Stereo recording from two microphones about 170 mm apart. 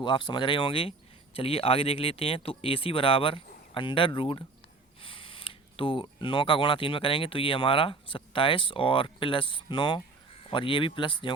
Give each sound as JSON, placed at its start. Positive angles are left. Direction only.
{"t": 0.0, "sound": "speech", "side_deg": 25}